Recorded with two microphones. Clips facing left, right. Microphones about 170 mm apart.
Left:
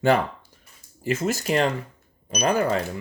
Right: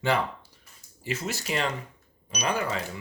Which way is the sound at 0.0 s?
50° left (ahead or behind).